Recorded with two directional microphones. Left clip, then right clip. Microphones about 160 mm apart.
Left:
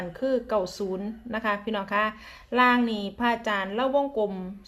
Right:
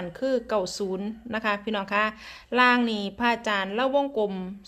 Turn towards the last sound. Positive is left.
turn(degrees=-35)  # may be behind; listen again after turning